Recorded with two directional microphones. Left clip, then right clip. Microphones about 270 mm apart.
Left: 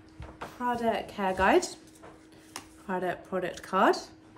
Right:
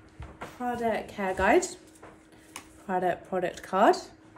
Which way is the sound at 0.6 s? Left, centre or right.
Centre.